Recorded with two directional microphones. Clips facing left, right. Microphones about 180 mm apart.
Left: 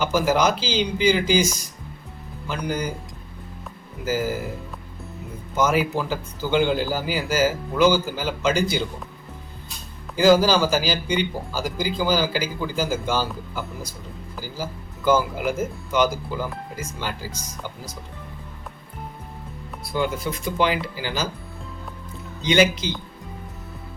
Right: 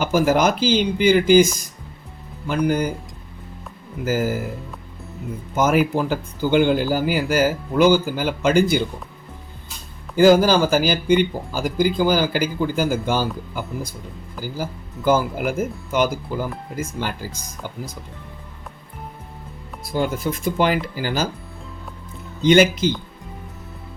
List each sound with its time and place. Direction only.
0.0 s speech: 50° right (ahead or behind)
2.6 s speech: 55° right (ahead or behind)
4.0 s speech: 50° right (ahead or behind)
5.5 s speech: 50° right (ahead or behind)
10.2 s speech: 50° right (ahead or behind)
19.9 s speech: 50° right (ahead or behind)
22.4 s speech: 50° right (ahead or behind)